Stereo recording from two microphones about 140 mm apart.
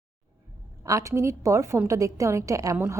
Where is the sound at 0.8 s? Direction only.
25° right (ahead or behind).